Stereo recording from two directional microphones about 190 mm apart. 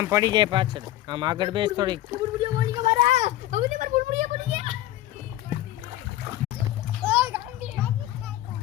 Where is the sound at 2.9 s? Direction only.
40° right (ahead or behind).